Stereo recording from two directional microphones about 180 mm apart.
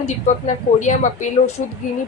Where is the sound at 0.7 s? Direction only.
45° left (ahead or behind).